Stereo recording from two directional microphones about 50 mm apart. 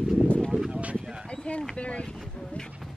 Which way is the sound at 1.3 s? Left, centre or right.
Centre.